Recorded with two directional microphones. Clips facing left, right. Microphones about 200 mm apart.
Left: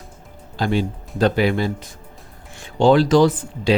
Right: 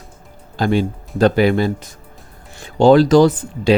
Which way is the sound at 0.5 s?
50° right (ahead or behind).